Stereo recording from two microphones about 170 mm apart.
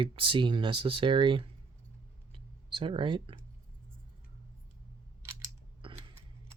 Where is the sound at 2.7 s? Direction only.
30° right (ahead or behind).